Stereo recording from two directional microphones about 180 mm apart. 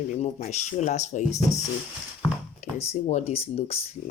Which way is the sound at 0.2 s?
40° left (ahead or behind).